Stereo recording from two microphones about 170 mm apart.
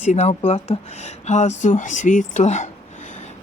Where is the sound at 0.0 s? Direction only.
40° left (ahead or behind).